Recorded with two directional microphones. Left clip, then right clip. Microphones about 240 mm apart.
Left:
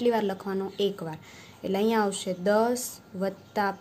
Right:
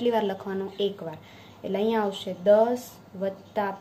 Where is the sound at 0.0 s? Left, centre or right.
Left.